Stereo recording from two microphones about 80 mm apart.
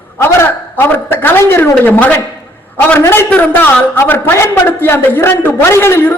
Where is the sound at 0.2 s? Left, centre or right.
Left.